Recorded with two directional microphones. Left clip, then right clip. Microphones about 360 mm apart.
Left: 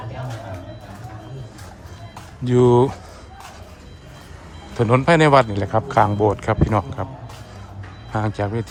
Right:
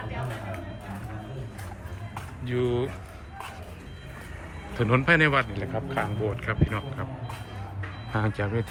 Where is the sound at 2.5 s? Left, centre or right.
Left.